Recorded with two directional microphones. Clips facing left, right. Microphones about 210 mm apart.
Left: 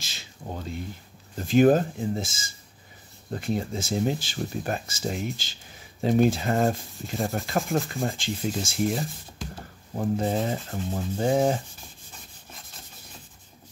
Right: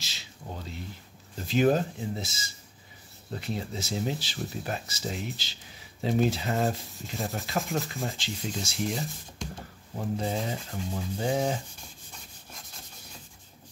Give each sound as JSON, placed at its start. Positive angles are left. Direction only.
{"t": 0.0, "sound": "speech", "side_deg": 50}
{"t": 9.9, "sound": "speech", "side_deg": 50}